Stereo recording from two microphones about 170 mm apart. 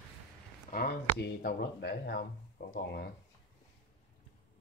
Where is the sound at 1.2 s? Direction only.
70° left (ahead or behind).